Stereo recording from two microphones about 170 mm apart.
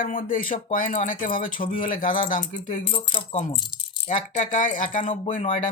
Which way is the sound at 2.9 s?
35° left (ahead or behind).